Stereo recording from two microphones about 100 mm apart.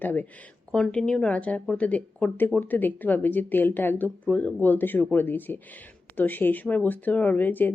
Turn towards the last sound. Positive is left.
turn(degrees=20)  # may be behind; listen again after turning